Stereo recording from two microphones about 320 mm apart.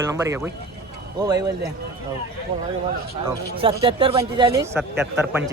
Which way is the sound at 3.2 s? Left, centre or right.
Centre.